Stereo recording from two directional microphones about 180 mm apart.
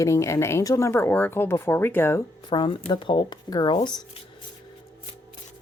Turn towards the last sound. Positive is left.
turn(degrees=25)  # may be behind; listen again after turning